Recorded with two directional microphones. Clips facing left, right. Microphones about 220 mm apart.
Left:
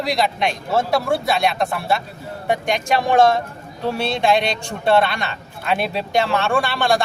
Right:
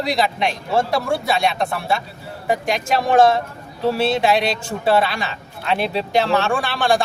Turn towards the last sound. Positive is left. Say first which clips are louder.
# even
turn(degrees=0)  # may be behind; listen again after turning